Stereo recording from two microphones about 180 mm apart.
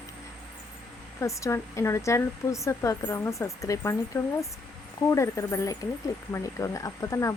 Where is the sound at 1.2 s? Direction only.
15° left (ahead or behind).